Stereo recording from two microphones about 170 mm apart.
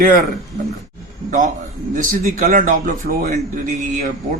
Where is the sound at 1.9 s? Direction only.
45° right (ahead or behind).